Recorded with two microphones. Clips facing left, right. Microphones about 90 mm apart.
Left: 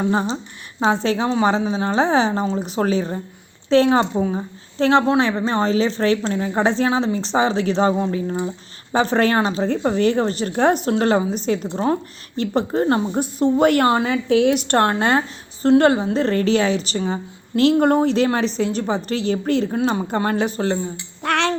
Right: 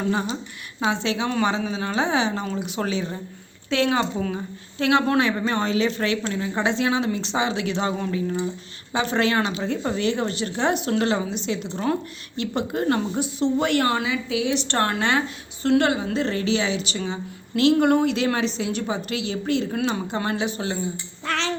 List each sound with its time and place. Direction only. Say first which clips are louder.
0.0 s a woman's voice: left 4 dB; 30° left (ahead or behind)
4.2 s speech: left 5 dB; 20° left (ahead or behind)
4.8 s a woman's voice: left 4 dB; 35° left (ahead or behind)
13.1 s a woman's voice: left 4 dB; 45° left (ahead or behind)
21.2 s a sound: left 6 dB; 60° left (ahead or behind)